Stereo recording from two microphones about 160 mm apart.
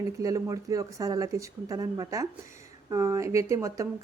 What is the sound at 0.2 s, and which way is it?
A woman's voice, 20° right (ahead or behind).